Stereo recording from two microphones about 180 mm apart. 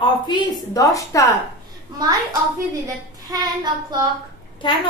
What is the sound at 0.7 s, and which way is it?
Speech, 20° left (ahead or behind).